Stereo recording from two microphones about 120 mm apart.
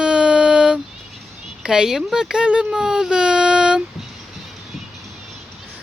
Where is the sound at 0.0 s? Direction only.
10° right (ahead or behind).